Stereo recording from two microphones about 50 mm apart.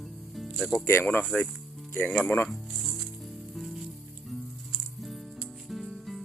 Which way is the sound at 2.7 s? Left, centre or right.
Centre.